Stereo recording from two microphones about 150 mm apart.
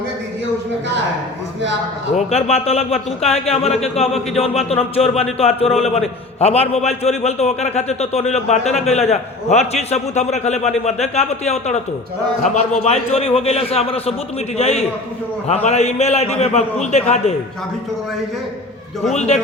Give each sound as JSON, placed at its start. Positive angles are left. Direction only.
{"t": 2.1, "sound": "speech", "side_deg": 45}
{"t": 19.1, "sound": "speech", "side_deg": 45}